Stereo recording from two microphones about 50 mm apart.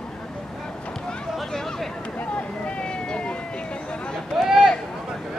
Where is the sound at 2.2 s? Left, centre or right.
Left.